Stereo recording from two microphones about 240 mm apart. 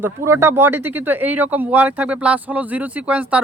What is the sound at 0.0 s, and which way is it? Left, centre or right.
Speech, centre.